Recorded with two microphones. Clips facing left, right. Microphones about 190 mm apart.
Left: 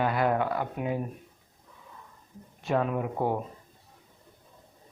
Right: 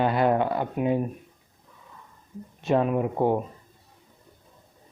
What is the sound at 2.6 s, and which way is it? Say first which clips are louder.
Speech: right 5 dB; 25° right (ahead or behind).